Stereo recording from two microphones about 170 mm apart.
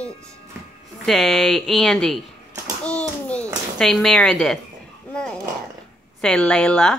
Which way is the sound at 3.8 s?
5° left (ahead or behind).